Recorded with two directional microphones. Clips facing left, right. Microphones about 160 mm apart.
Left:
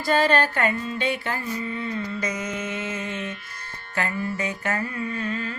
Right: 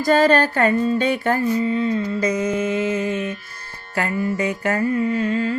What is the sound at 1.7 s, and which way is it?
Music, 30° right (ahead or behind).